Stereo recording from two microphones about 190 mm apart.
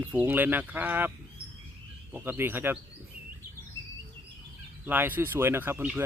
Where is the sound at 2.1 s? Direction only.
10° right (ahead or behind).